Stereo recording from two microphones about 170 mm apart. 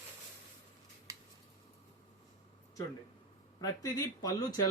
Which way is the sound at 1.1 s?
20° right (ahead or behind).